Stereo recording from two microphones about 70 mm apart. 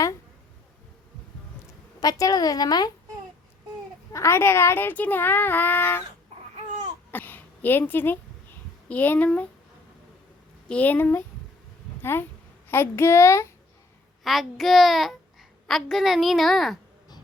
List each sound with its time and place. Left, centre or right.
2.0 s a woman's voice: left
4.1 s speech: left
7.1 s speech: left
10.7 s speech: left
12.7 s speech: left
14.3 s a child's voice: centre